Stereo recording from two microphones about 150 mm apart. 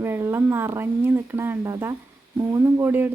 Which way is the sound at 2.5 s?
20° right (ahead or behind).